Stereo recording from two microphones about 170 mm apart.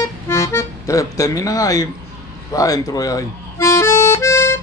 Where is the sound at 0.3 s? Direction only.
15° left (ahead or behind).